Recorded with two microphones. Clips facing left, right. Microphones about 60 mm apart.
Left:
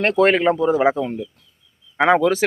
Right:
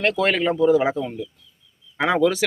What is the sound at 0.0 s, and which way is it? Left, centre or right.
Speech, left.